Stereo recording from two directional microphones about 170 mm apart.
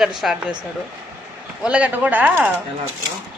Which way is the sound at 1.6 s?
5° right (ahead or behind).